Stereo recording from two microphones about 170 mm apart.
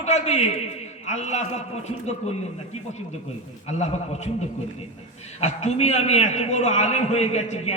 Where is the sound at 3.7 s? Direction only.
40° left (ahead or behind).